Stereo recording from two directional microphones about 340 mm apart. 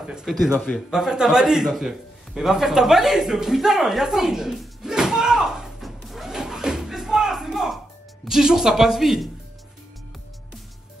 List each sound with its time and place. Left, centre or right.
0.0 s speech: centre
0.5 s a sound: centre
8.3 s speech: centre